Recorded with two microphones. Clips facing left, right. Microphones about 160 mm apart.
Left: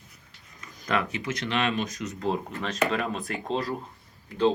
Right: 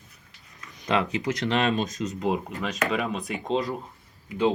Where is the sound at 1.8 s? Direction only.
20° right (ahead or behind); by 3.1 s 5° right (ahead or behind).